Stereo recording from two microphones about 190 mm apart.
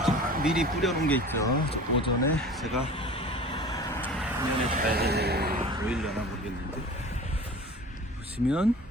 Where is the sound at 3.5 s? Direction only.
25° left (ahead or behind).